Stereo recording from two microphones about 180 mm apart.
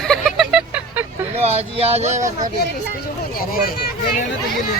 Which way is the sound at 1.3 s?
35° right (ahead or behind).